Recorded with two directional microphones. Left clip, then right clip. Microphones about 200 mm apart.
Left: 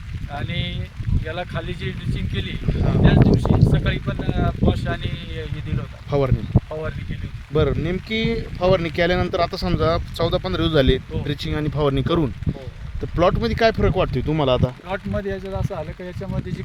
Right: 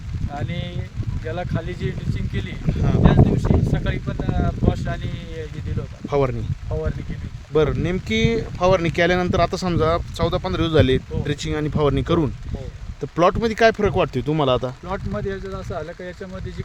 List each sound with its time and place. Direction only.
0.3 s speech: 5° right (ahead or behind)
6.1 s speech: 10° right (ahead or behind)
7.5 s speech: 5° right (ahead or behind)
14.8 s speech: 45° left (ahead or behind)